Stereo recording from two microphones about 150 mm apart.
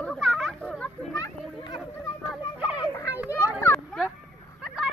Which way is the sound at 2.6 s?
10° right (ahead or behind).